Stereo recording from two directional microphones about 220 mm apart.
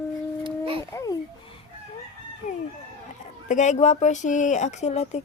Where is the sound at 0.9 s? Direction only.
15° left (ahead or behind).